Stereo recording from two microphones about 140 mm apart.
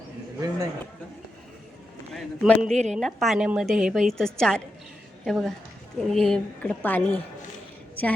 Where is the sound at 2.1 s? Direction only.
Centre (ahead or behind).